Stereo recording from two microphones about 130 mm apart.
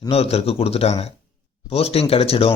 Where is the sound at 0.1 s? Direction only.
50° left (ahead or behind).